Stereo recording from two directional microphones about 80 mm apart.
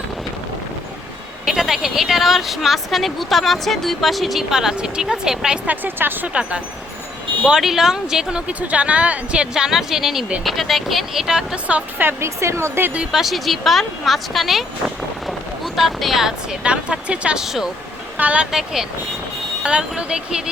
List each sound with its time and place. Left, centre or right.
1.5 s speech: centre
5.6 s speech: right
7.4 s speech: centre
11.9 s speech: right
13.1 s speech: centre
18.2 s speech: centre
18.5 s speech: centre